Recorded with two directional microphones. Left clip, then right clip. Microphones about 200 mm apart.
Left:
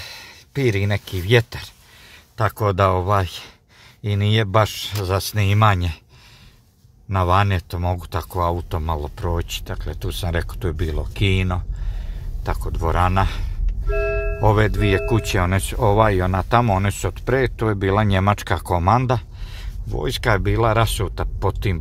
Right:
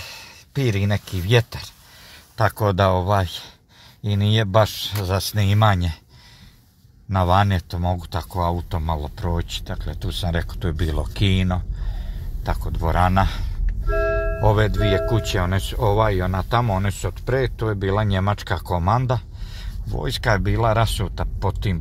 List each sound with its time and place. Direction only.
0.0 s speech: 15° left (ahead or behind)
7.1 s speech: 20° left (ahead or behind)
10.8 s speech: 10° left (ahead or behind)
11.2 s speech: 25° left (ahead or behind)
13.8 s music: 25° right (ahead or behind)
14.4 s speech: 30° left (ahead or behind)